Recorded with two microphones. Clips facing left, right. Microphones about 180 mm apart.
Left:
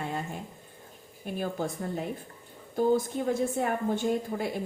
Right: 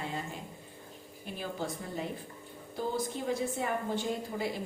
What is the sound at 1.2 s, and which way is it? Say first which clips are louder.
Speech: left 5 dB; 50° left (ahead or behind).